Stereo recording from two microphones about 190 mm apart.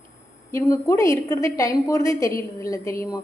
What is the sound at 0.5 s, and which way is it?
A woman's voice, 15° left (ahead or behind).